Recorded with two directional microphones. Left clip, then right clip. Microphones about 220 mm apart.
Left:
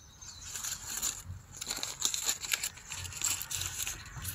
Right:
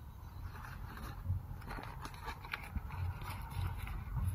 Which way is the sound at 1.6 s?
45° left (ahead or behind).